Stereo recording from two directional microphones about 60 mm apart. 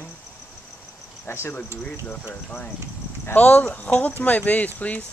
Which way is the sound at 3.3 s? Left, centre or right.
Left.